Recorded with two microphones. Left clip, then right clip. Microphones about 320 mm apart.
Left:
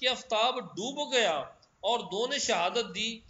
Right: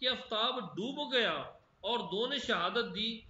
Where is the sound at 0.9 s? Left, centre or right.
Centre.